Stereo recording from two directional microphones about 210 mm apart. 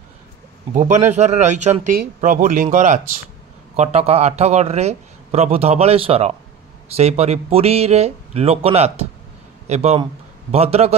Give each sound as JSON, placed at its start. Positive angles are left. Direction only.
{"t": 0.7, "sound": "a man's voice", "side_deg": -35}